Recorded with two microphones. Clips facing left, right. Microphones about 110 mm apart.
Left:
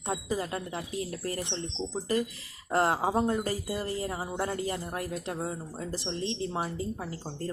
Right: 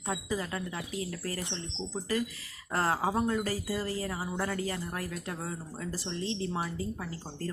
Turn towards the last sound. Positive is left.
turn(degrees=25)  # may be behind; listen again after turning